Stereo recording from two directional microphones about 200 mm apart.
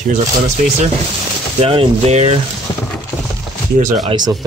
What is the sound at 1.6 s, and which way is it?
Speech, 30° right (ahead or behind).